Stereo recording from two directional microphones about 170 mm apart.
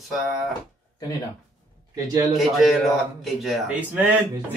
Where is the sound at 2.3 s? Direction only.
Centre (ahead or behind).